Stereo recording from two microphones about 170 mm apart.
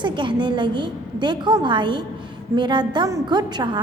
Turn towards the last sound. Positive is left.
turn(degrees=-25)  # may be behind; listen again after turning